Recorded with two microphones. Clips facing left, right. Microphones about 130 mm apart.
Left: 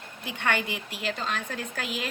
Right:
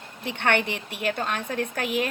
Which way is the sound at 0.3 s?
65° right (ahead or behind).